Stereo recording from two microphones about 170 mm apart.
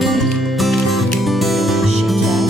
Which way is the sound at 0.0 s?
Centre (ahead or behind).